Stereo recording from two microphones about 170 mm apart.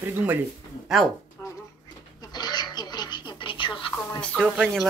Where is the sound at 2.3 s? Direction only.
25° left (ahead or behind).